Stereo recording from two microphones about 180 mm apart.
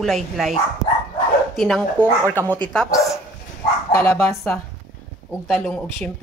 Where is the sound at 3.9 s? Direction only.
15° left (ahead or behind).